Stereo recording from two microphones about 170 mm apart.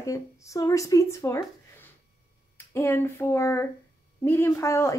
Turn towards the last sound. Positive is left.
turn(degrees=15)  # may be behind; listen again after turning